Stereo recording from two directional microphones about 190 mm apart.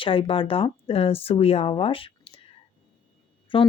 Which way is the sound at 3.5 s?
25° left (ahead or behind).